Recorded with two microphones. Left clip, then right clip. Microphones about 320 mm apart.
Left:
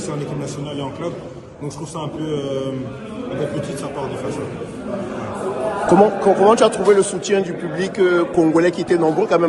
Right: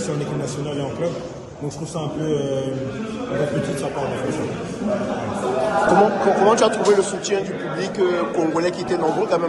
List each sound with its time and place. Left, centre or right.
6.0 s speech: left